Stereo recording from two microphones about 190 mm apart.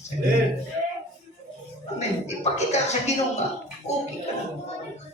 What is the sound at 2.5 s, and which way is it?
Speech, 35° left (ahead or behind).